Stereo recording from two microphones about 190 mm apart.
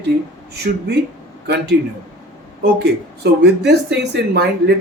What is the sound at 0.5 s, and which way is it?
Speech, 60° right (ahead or behind).